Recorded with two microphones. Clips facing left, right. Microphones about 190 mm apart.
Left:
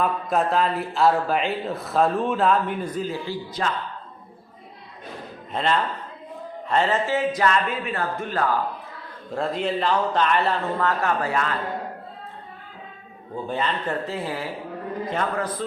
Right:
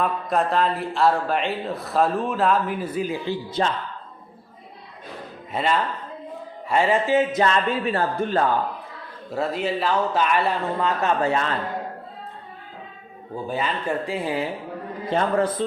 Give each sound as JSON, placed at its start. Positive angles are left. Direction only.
{"t": 0.0, "sound": "speech", "side_deg": 0}
{"t": 3.6, "sound": "speech", "side_deg": -30}
{"t": 5.5, "sound": "speech", "side_deg": -5}
{"t": 9.3, "sound": "a man's voice", "side_deg": -5}
{"t": 13.3, "sound": "a man's voice", "side_deg": -10}
{"t": 15.1, "sound": "speech", "side_deg": -25}